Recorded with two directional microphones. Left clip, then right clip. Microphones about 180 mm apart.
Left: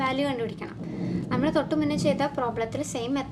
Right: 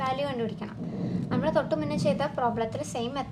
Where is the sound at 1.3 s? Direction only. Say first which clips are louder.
Left 1 dB; 25° left (ahead or behind).